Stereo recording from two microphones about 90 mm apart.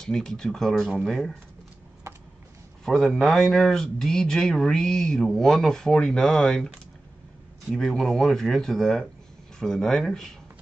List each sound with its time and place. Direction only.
0.0 s speech: 5° left (ahead or behind)
2.8 s speech: 5° left (ahead or behind)
7.7 s speech: 5° left (ahead or behind)